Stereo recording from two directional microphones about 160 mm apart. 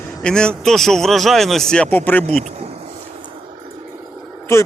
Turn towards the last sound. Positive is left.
turn(degrees=15)  # may be behind; listen again after turning